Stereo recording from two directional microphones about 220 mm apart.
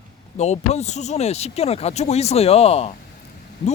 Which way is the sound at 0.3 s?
30° left (ahead or behind).